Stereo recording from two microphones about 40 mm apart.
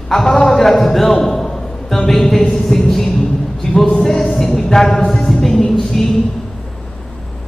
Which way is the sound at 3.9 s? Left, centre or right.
Centre.